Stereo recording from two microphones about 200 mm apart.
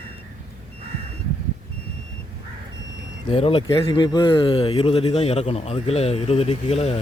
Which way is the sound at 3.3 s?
30° left (ahead or behind).